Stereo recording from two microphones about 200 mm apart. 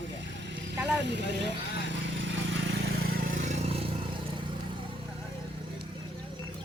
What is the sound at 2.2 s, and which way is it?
Vehicle, 70° right (ahead or behind).